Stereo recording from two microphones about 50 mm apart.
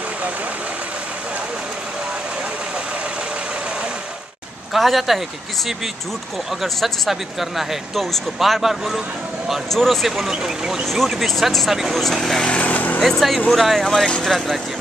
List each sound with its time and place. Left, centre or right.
4.7 s speech: centre
6.6 s speech: centre
12.4 s speech: left
13.2 s speech: centre